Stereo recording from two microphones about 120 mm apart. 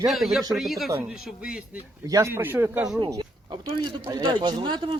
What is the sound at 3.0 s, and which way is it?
A man's voice, 35° right (ahead or behind).